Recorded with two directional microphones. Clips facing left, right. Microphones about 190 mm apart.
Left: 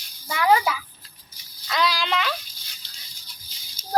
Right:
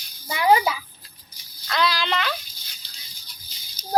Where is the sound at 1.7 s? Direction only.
5° left (ahead or behind).